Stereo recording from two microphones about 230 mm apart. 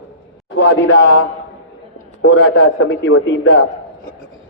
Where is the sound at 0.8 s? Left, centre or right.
Left.